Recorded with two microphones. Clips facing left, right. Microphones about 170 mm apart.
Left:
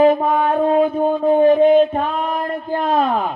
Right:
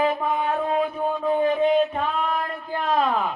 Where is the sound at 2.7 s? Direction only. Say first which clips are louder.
Left 4 dB; 30° left (ahead or behind).